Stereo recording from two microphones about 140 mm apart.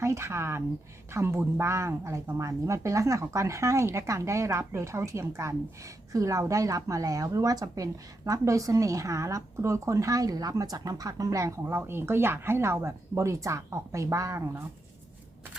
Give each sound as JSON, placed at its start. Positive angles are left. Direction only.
{"t": 0.0, "sound": "speech", "side_deg": -20}